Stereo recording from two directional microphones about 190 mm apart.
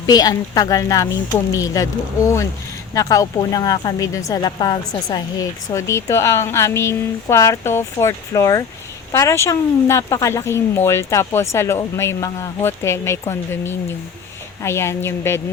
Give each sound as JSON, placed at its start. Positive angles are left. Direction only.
{"t": 0.0, "sound": "a woman's voice", "side_deg": 20}